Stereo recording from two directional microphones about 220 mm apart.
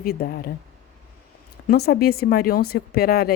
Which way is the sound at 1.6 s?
45° left (ahead or behind).